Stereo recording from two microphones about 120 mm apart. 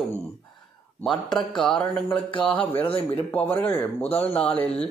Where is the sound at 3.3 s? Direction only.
15° left (ahead or behind).